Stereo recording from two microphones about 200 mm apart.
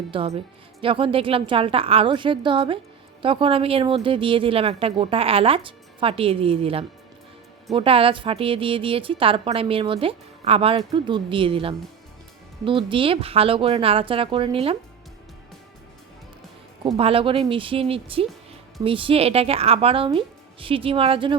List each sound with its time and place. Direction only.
0.1 s a woman's voice: 25° right (ahead or behind)
16.8 s a woman's voice: 25° right (ahead or behind)